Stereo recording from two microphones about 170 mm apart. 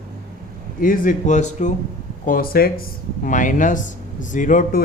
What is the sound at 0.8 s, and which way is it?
Speech, 55° left (ahead or behind).